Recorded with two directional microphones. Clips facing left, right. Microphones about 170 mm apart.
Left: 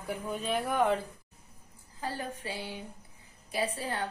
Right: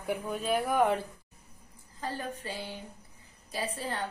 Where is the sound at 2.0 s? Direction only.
10° left (ahead or behind).